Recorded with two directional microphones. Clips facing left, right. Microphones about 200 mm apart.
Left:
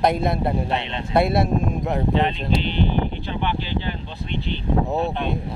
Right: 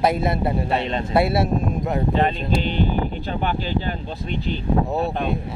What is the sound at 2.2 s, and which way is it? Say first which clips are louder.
Speech: right 1 dB; 45° right (ahead or behind).